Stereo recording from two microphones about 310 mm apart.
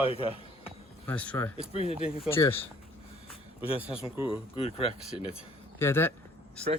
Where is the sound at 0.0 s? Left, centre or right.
Centre.